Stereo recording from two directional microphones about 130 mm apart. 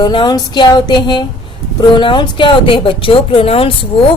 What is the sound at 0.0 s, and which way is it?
A woman's voice, 35° left (ahead or behind).